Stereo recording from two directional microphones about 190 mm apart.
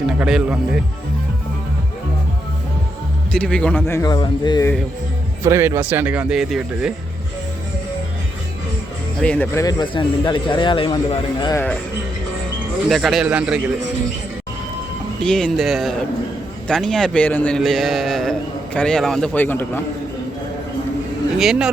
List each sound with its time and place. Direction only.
0.2 s a man's voice: 5° right (ahead or behind)
3.3 s a man's voice: 5° left (ahead or behind); by 4.6 s 20° left (ahead or behind)
5.4 s speech: 15° right (ahead or behind)
9.2 s a man's voice: 5° left (ahead or behind)
9.6 s a man's voice: 25° left (ahead or behind)
12.9 s a man's voice: centre (ahead or behind)
15.2 s a man's voice: 5° left (ahead or behind)
21.3 s a man's voice: centre (ahead or behind)